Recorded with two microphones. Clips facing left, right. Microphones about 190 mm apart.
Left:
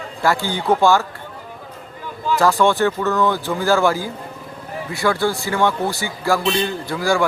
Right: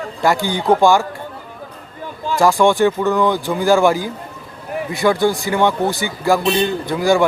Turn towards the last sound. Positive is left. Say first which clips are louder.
# right 4 dB
turn(degrees=-20)  # may be behind; listen again after turning